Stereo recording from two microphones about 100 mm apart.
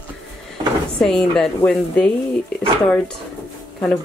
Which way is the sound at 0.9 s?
5° left (ahead or behind).